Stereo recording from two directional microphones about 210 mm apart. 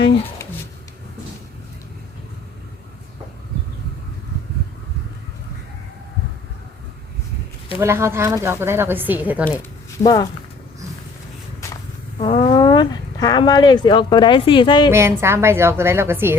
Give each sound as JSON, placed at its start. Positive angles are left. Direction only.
{"t": 7.8, "sound": "speech", "side_deg": -10}
{"t": 10.0, "sound": "speech", "side_deg": 20}
{"t": 12.2, "sound": "speech", "side_deg": 25}
{"t": 14.8, "sound": "speech", "side_deg": -10}